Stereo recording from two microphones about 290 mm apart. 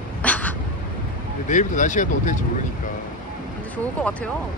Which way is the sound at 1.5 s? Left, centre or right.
Left.